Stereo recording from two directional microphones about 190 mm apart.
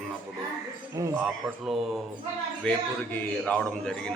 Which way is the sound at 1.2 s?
Centre (ahead or behind).